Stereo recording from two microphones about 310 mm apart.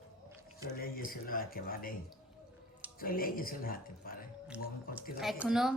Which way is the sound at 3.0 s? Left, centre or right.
Left.